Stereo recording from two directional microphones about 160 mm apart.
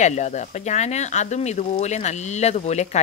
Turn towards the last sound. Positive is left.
turn(degrees=45)  # may be behind; listen again after turning